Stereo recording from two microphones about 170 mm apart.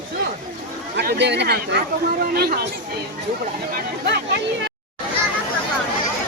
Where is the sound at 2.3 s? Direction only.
65° right (ahead or behind).